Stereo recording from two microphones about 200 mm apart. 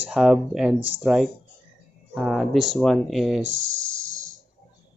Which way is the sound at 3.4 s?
75° right (ahead or behind).